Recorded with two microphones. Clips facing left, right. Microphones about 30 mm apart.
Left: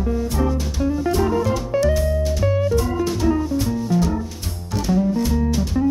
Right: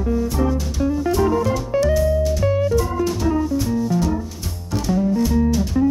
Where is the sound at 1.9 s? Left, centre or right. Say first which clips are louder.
Right 3 dB; centre.